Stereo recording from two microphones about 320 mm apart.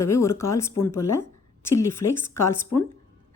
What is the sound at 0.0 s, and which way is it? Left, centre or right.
A woman's voice, centre.